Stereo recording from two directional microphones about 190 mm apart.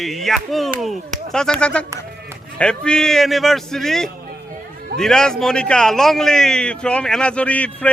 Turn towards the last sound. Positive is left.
turn(degrees=5)  # may be behind; listen again after turning